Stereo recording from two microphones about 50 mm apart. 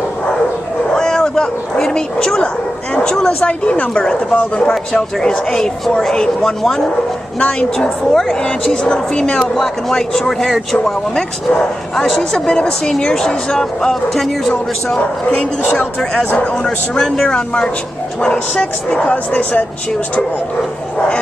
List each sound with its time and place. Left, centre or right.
0.9 s speech: centre
3.4 s speech: left; by 6.5 s centre
7.5 s speech: centre
16.5 s speech: centre
18.2 s speech: left
19.0 s speech: left